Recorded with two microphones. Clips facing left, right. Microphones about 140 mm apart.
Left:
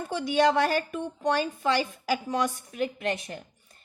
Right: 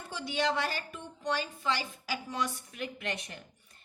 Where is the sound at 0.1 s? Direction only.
50° left (ahead or behind).